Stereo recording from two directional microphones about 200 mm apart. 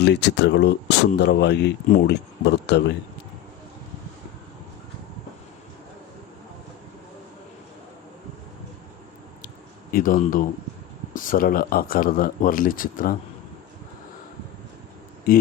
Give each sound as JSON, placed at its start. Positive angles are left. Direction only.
{"t": 0.0, "sound": "speech", "side_deg": 55}
{"t": 9.9, "sound": "speech", "side_deg": 45}